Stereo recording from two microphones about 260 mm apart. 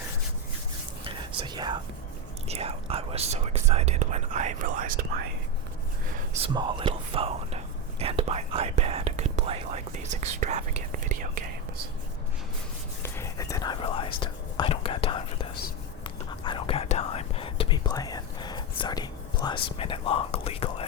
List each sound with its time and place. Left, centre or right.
1.0 s whispering: centre
2.5 s speech: right
6.4 s speech: centre
13.0 s whispering: centre
19.6 s speech: centre